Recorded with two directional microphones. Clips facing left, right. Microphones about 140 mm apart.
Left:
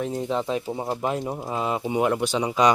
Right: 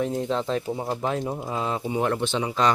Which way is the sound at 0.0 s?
Centre (ahead or behind).